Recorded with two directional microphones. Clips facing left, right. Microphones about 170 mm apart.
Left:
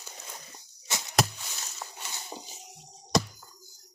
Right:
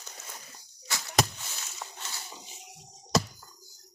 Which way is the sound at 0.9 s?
20° left (ahead or behind).